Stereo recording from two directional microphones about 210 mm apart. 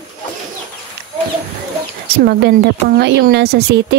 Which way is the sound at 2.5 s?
50° right (ahead or behind).